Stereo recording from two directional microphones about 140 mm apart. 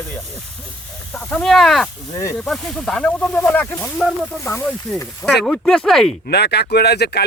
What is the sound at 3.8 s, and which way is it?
Speech, centre (ahead or behind).